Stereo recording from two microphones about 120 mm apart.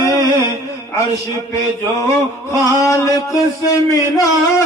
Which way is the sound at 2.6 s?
30° left (ahead or behind).